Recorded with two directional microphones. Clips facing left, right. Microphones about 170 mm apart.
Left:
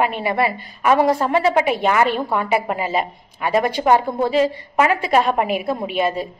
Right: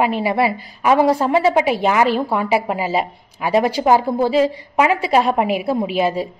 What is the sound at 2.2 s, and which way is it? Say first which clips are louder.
A woman's voice: right 2 dB; 5° right (ahead or behind).